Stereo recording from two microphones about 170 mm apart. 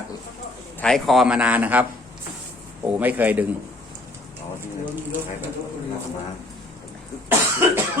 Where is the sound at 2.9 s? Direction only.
10° right (ahead or behind).